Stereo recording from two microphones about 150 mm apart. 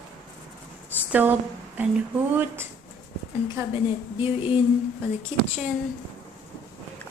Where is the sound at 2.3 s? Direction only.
15° right (ahead or behind).